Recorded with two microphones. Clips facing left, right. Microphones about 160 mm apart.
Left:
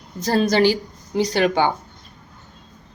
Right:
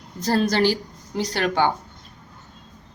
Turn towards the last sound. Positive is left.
turn(degrees=10)  # may be behind; listen again after turning